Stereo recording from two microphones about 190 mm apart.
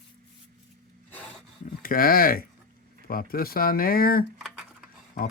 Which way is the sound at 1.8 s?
50° left (ahead or behind).